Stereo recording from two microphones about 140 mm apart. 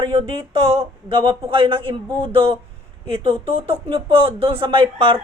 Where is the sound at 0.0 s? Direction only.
40° right (ahead or behind).